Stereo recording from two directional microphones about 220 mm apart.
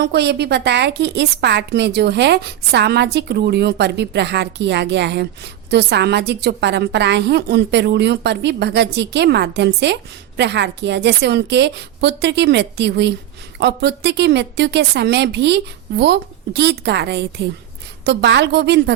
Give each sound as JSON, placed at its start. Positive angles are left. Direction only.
{"t": 0.0, "sound": "a woman's voice", "side_deg": -50}